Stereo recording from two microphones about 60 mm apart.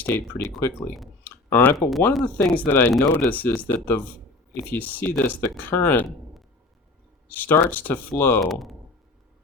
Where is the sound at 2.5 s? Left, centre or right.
Left.